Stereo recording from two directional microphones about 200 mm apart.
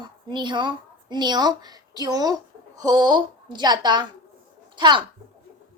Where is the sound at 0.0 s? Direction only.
20° right (ahead or behind).